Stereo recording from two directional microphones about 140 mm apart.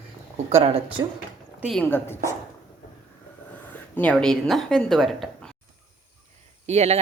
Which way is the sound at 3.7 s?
10° left (ahead or behind).